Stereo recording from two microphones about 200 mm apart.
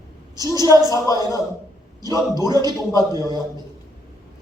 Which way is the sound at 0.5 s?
20° right (ahead or behind).